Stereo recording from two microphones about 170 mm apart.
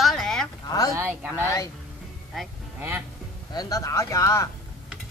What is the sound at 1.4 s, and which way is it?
Speech, 20° left (ahead or behind).